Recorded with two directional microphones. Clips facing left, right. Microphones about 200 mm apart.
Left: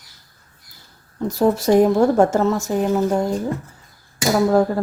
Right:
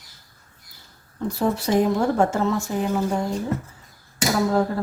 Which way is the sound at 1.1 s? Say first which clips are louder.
Left 5 dB; 40° left (ahead or behind).